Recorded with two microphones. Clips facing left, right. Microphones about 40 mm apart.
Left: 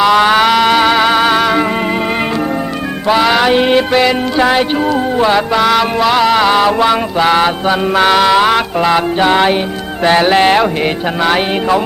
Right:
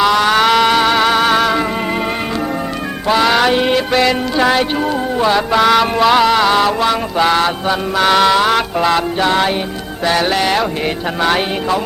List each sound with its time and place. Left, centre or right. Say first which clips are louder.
0.2 s music: left 3 dB; centre
0.4 s music: left 2 dB; centre
3.1 s music: left 2 dB; centre
3.5 s music: left 4 dB; centre
5.5 s music: even; centre
9.0 s music: left 4 dB; left
11.2 s music: left 2 dB; centre